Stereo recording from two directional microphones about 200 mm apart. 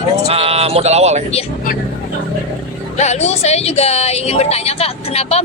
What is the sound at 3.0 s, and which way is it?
Speech, 35° left (ahead or behind).